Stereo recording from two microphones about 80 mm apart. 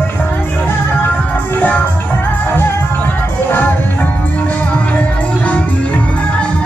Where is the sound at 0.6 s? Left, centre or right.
Left.